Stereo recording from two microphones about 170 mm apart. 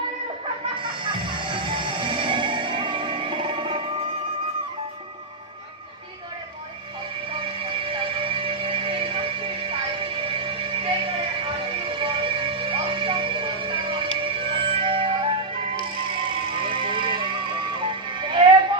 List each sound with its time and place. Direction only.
0.8 s music: 30° right (ahead or behind)
7.3 s music: 30° right (ahead or behind)